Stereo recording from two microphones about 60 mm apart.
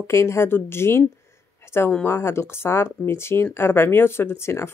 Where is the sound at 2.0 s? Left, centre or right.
Left.